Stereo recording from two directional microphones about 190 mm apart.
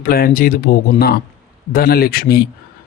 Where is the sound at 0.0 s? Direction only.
50° left (ahead or behind).